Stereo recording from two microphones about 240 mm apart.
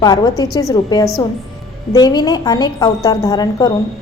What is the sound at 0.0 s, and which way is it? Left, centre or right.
A woman's voice, centre.